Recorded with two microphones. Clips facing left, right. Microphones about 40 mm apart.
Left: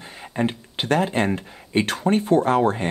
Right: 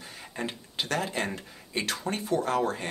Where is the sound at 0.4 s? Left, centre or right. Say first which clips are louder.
Left 9 dB; left.